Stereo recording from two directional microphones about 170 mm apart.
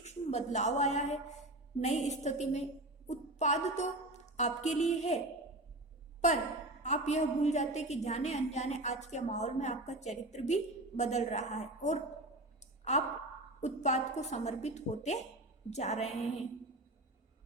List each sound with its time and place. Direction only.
0.0 s a woman's voice: 40° left (ahead or behind)
6.8 s a woman's voice: 45° left (ahead or behind)